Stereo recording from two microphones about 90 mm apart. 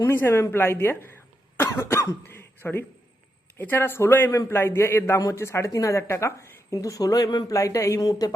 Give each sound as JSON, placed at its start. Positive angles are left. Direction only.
{"t": 0.0, "sound": "a woman's voice", "side_deg": 25}